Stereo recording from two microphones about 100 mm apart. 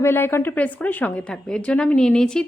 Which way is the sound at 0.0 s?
25° left (ahead or behind).